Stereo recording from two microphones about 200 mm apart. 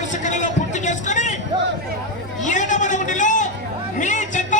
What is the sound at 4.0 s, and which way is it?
Music, 40° left (ahead or behind).